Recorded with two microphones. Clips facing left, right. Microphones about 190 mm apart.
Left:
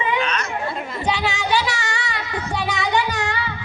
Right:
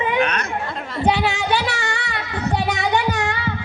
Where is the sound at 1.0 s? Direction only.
55° right (ahead or behind).